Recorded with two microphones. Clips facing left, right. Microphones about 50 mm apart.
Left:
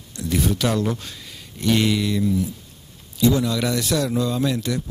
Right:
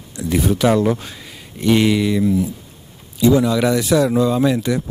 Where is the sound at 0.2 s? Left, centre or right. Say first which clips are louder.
Right 5 dB; centre.